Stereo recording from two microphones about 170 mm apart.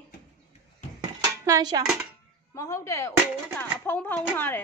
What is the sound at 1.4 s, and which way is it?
Dishes, 20° right (ahead or behind).